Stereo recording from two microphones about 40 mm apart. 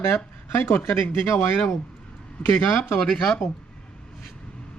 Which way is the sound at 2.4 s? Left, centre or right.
Left.